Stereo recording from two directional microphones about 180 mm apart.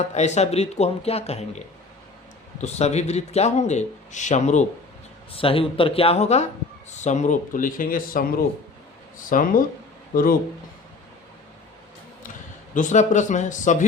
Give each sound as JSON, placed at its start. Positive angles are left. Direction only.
{"t": 0.1, "sound": "a man's voice", "side_deg": 40}
{"t": 5.3, "sound": "a man's voice", "side_deg": 30}
{"t": 12.7, "sound": "speech", "side_deg": 45}